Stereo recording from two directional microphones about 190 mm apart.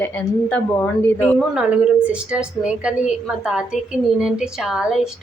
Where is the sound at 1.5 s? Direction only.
5° right (ahead or behind).